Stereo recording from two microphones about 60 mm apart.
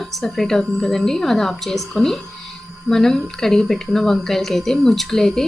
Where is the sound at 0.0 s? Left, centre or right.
Centre.